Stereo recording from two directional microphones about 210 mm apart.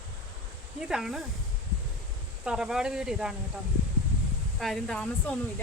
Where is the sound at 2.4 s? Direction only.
5° right (ahead or behind).